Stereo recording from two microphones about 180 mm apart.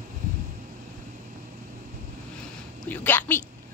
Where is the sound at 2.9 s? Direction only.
10° left (ahead or behind).